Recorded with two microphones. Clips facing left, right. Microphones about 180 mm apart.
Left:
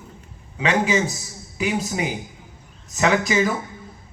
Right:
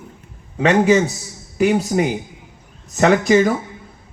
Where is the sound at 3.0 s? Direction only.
55° right (ahead or behind).